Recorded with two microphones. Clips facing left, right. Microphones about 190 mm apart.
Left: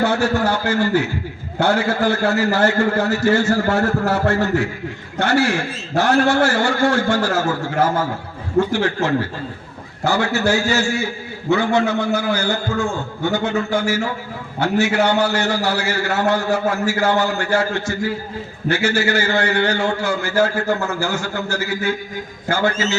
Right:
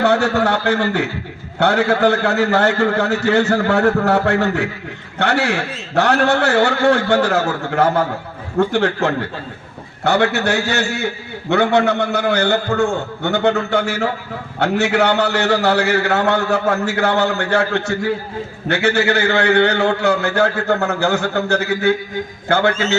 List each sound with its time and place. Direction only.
0.0 s a man's voice: 65° right (ahead or behind)